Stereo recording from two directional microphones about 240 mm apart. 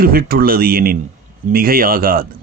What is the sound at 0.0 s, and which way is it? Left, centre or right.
Speech, right.